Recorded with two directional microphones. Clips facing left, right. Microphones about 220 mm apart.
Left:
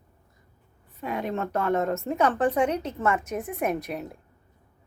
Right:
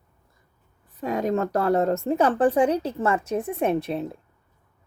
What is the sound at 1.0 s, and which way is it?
A woman's voice, 40° right (ahead or behind).